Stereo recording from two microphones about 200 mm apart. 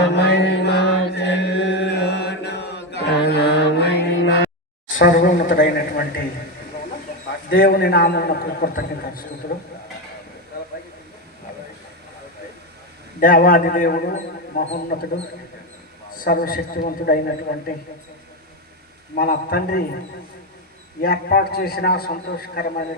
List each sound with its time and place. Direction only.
0.1 s chant: 60° left (ahead or behind)
4.9 s a sound: 45° left (ahead or behind)
7.5 s a man's voice: 50° left (ahead or behind)
13.1 s a man's voice: 45° left (ahead or behind)
16.1 s a man's voice: 45° left (ahead or behind)
19.1 s a man's voice: 45° left (ahead or behind)
21.0 s a man's voice: 50° left (ahead or behind)